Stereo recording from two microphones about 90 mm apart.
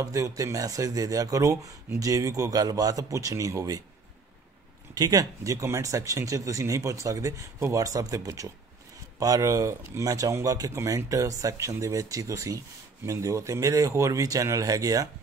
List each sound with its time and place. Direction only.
0.0 s speech: 35° right (ahead or behind)
4.9 s speech: 45° right (ahead or behind)